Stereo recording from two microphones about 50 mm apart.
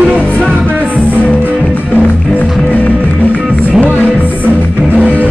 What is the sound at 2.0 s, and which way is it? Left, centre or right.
Music, left.